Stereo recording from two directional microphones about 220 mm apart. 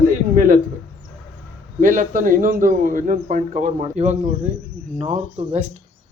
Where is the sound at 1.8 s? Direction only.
35° right (ahead or behind).